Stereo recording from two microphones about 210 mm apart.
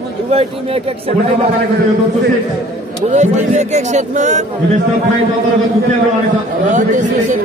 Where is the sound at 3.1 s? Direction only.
35° right (ahead or behind).